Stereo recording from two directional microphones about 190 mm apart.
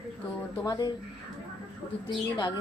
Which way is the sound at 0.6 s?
20° left (ahead or behind).